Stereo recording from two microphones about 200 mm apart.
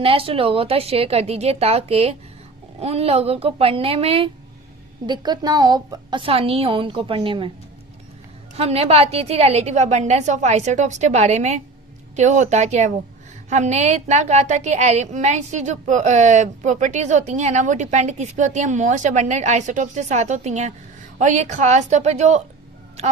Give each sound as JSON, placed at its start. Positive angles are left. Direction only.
{"t": 0.0, "sound": "a woman's voice", "side_deg": -30}
{"t": 8.5, "sound": "a woman's voice", "side_deg": -30}